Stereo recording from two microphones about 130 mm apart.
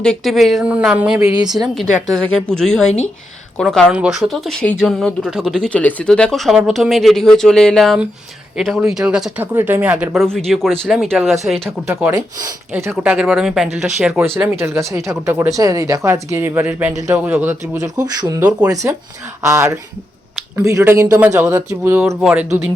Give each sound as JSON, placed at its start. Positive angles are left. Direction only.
{"t": 0.0, "sound": "speech", "side_deg": 5}
{"t": 3.8, "sound": "speech", "side_deg": -5}
{"t": 9.4, "sound": "speech", "side_deg": -15}
{"t": 10.2, "sound": "speech", "side_deg": 5}
{"t": 11.9, "sound": "speech", "side_deg": -15}
{"t": 13.1, "sound": "speech", "side_deg": -5}
{"t": 14.6, "sound": "a woman's voice", "side_deg": -20}
{"t": 22.2, "sound": "speech", "side_deg": -5}